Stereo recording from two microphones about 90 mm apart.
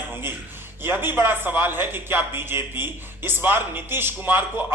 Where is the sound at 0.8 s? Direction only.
25° right (ahead or behind).